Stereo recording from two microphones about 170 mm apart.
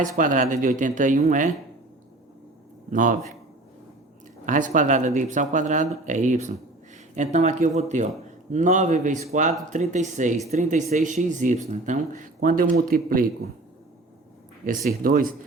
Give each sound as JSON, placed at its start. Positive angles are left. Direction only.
{"t": 0.2, "sound": "speech", "side_deg": -50}
{"t": 2.9, "sound": "speech", "side_deg": -50}
{"t": 4.4, "sound": "speech", "side_deg": -50}
{"t": 14.8, "sound": "speech", "side_deg": -60}